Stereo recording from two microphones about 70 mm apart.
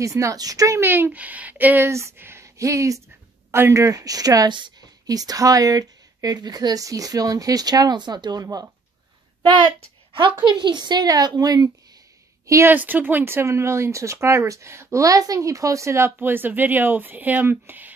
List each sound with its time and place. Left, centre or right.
0.0 s a woman's voice: right
0.7 s speech: right
1.9 s speech: right
2.4 s speech: right
10.4 s a woman's voice: right
12.6 s speech: right